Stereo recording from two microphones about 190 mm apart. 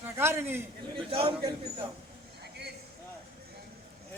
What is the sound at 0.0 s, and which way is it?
Speech, 15° right (ahead or behind).